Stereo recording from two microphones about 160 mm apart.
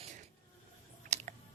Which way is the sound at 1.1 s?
45° right (ahead or behind).